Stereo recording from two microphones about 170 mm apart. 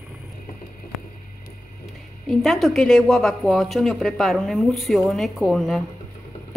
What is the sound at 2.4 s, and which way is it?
Speech, centre (ahead or behind).